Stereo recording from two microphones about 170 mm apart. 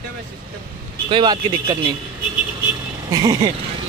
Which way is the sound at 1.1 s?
30° right (ahead or behind).